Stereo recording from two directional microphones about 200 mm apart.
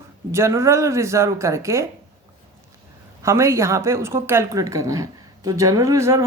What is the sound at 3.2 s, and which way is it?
Speech, 15° right (ahead or behind).